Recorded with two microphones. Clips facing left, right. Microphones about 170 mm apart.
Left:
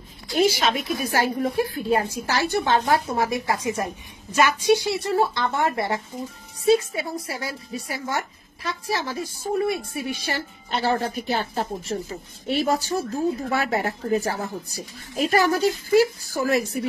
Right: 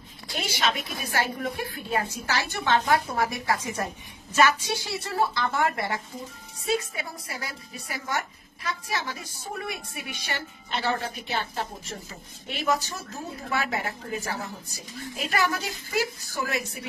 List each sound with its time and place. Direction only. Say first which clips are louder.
0.3 s a woman's voice: left 8 dB; 35° left (ahead or behind)
3.3 s a woman's voice: left 4 dB; 20° left (ahead or behind); by 16.8 s 40° left (ahead or behind)